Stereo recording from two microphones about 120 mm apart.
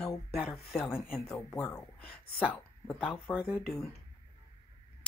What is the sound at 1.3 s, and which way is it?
Speech, 20° left (ahead or behind).